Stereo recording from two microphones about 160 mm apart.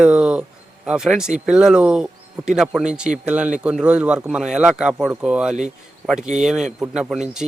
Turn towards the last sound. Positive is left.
turn(degrees=-5)  # may be behind; listen again after turning